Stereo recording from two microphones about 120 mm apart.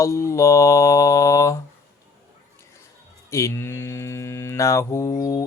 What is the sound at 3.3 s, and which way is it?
Mantra, 25° left (ahead or behind).